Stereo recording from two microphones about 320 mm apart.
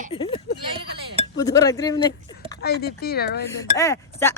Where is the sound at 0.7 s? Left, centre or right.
Centre.